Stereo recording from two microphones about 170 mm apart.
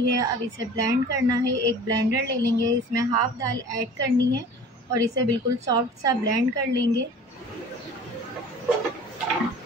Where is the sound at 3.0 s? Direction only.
20° right (ahead or behind).